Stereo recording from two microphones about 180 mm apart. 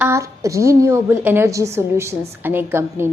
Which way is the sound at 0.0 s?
15° right (ahead or behind).